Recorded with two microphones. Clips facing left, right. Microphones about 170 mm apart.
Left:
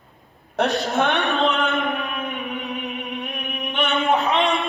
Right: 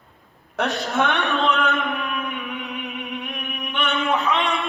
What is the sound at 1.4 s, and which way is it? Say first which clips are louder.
Music: left 1 dB; 40° left (ahead or behind).